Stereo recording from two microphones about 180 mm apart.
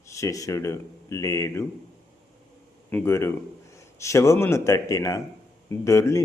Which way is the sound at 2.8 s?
10° left (ahead or behind).